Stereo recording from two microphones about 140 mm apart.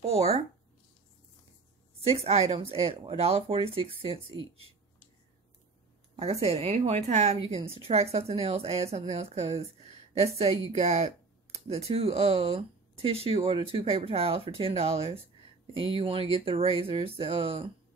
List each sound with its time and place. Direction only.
2.0 s a woman's voice: 50° right (ahead or behind)
6.1 s a woman's voice: 45° right (ahead or behind)